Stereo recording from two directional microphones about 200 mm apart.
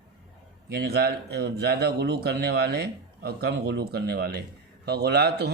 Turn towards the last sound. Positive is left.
turn(degrees=-55)  # may be behind; listen again after turning